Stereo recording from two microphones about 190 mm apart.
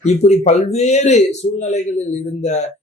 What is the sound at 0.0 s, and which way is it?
Speech, 35° left (ahead or behind).